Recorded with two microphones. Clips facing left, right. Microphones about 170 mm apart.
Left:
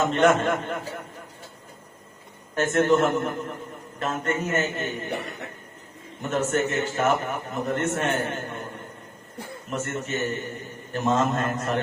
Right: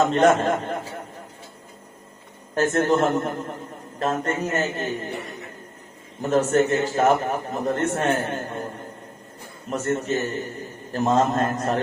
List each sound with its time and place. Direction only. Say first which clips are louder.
0.0 s a man's voice: right 2 dB; 35° right (ahead or behind)
2.6 s a man's voice: right 1 dB; 35° right (ahead or behind)
6.3 s a man's voice: right 5 dB; 35° right (ahead or behind)
9.6 s a man's voice: right 6 dB; 35° right (ahead or behind)